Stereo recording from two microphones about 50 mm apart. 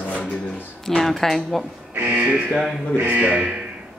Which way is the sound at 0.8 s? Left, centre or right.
Centre.